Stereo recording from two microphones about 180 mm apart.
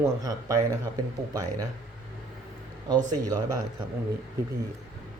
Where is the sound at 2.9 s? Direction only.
20° right (ahead or behind).